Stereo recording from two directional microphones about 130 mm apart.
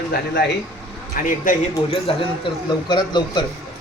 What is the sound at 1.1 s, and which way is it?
Speech, 90° left.